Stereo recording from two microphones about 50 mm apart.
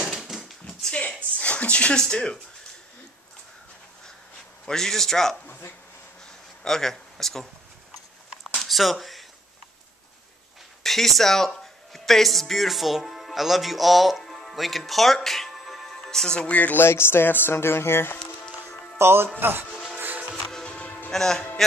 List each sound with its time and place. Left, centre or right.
0.0 s dog: centre
0.9 s speech: left
4.6 s speech: centre
6.2 s a sound: centre
8.5 s a sound: centre
10.8 s speech: centre
16.4 s music: left
16.7 s speech: left
18.9 s speech: right
20.6 s music: left
21.1 s speech: centre